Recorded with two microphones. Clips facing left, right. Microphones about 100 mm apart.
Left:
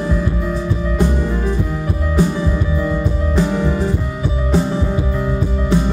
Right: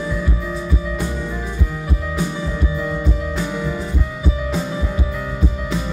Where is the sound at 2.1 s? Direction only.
35° left (ahead or behind).